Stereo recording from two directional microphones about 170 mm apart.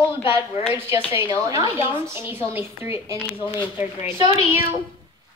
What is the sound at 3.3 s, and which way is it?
Speech, 30° left (ahead or behind).